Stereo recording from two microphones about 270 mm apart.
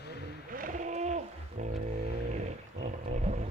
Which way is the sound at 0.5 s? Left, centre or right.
Right.